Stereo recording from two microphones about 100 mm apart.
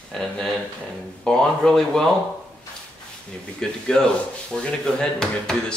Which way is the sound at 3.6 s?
5° left (ahead or behind).